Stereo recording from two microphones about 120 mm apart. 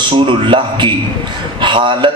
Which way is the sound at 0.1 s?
45° right (ahead or behind).